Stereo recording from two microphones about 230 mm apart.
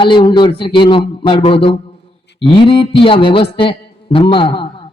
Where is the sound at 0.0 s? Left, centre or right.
Left.